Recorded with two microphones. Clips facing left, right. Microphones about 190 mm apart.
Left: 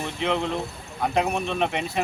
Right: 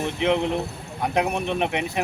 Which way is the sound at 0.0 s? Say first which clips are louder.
Right 4 dB; 20° right (ahead or behind).